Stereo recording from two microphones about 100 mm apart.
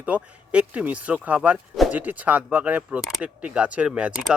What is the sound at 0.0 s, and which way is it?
Speech, 15° right (ahead or behind).